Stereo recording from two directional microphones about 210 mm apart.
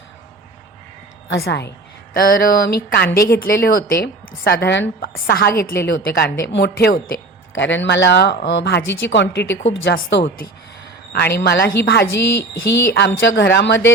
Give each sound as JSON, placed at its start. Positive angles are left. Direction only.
{"t": 1.5, "sound": "a woman's voice", "side_deg": 55}